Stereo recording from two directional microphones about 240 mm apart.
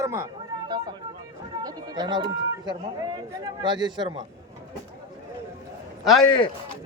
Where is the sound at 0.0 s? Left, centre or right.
Centre.